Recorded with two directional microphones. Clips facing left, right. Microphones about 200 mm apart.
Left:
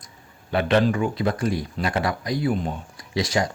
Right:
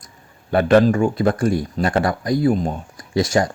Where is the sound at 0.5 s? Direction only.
45° right (ahead or behind).